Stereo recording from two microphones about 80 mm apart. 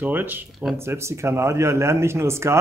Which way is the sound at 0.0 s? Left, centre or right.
Right.